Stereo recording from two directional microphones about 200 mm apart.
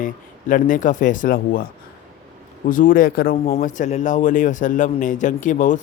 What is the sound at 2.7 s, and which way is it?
Speech, 40° left (ahead or behind).